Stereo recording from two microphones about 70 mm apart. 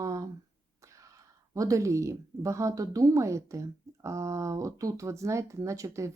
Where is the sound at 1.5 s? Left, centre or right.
Right.